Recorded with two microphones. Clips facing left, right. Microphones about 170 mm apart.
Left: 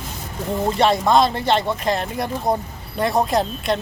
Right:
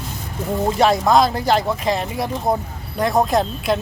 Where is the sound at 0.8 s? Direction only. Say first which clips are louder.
Right 1 dB; centre (ahead or behind).